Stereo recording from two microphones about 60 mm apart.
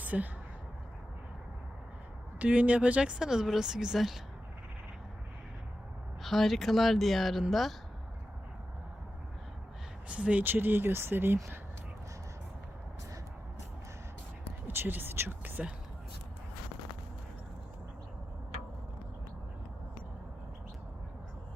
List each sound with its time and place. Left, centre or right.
0.0 s a sound: right
2.4 s speech: right; by 4.2 s centre
6.2 s speech: centre
10.1 s speech: right
10.4 s speech: right
14.7 s speech: right